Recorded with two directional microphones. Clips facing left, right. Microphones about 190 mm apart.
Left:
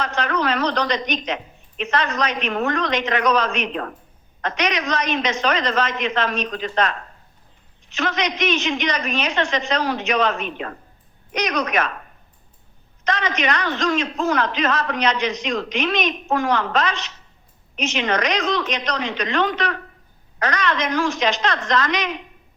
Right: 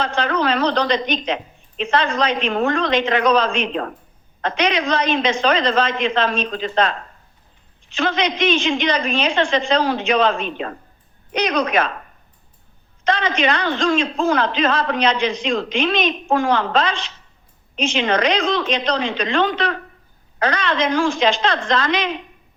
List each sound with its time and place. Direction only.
0.0 s a man's voice: 30° right (ahead or behind)
13.1 s a man's voice: 30° right (ahead or behind)